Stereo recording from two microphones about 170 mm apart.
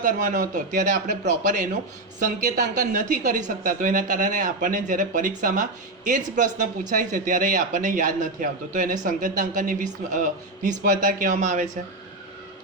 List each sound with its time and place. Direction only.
0.0 s a man's voice: 50° right (ahead or behind)